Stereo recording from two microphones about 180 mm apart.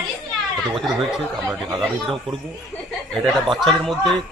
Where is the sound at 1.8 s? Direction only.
Centre (ahead or behind).